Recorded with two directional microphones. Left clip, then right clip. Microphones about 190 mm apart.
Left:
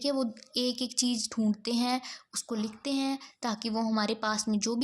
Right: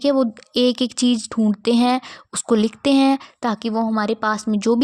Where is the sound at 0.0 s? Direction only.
45° right (ahead or behind).